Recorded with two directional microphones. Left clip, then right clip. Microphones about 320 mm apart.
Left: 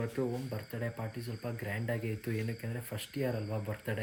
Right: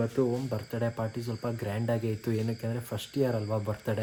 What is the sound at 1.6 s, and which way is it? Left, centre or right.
Speech, centre.